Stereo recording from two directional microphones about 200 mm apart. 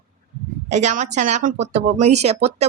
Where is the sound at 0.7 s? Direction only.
35° right (ahead or behind).